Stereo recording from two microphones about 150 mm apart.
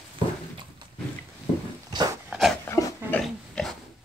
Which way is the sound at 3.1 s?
5° left (ahead or behind).